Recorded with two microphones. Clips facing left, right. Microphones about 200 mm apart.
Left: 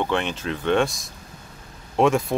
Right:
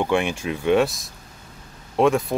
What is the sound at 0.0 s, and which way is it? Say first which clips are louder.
Speech: right 3 dB; 10° right (ahead or behind).